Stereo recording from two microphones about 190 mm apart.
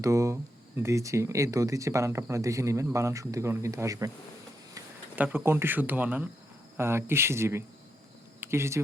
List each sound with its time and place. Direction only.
0.0 s speech: 15° right (ahead or behind)